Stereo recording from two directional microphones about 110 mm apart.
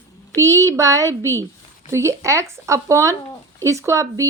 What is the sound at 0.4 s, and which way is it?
A woman's voice, 30° right (ahead or behind).